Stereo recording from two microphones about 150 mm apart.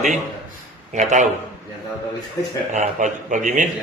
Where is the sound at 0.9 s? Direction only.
55° right (ahead or behind).